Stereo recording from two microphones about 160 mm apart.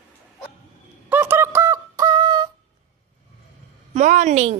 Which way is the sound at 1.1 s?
15° right (ahead or behind).